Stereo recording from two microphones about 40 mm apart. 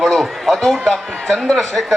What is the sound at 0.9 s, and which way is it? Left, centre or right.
Speech, centre.